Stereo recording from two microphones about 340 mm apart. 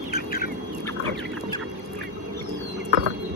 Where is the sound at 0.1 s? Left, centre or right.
Left.